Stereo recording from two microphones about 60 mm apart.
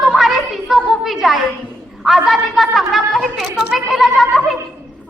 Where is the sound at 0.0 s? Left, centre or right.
Centre.